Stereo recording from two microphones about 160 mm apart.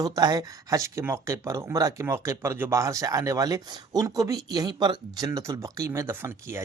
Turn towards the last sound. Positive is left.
turn(degrees=-15)  # may be behind; listen again after turning